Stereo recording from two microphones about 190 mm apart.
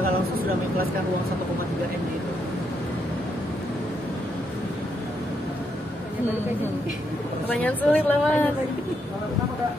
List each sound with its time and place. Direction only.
7.4 s a woman's voice: 10° left (ahead or behind)